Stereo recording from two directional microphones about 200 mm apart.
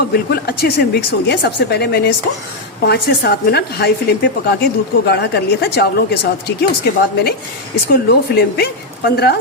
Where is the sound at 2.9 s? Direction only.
55° left (ahead or behind).